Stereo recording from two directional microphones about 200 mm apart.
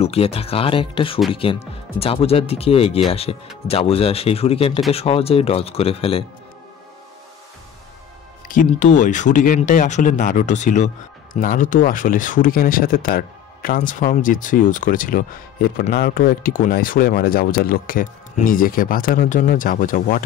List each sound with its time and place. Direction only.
0.0 s speech: 30° left (ahead or behind)
8.5 s speech: 40° left (ahead or behind)